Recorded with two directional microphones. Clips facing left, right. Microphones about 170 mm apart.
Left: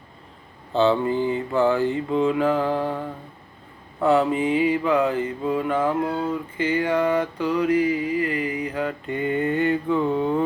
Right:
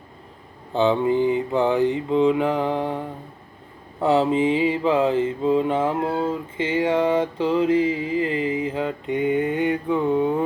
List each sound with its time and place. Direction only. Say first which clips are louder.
0.7 s mantra: right 1 dB; 15° right (ahead or behind)
4.0 s mantra: right 1 dB; 25° right (ahead or behind)